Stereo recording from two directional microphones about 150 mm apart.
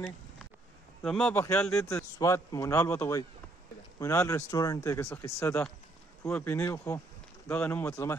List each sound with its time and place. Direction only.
1.0 s speech: 5° left (ahead or behind)
1.5 s speech: 20° left (ahead or behind)